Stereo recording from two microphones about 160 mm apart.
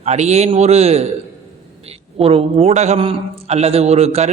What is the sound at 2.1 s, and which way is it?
A man's voice, 35° right (ahead or behind).